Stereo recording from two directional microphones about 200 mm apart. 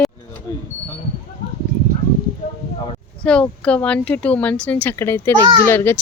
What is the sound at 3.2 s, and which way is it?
A child's voice, 5° left (ahead or behind).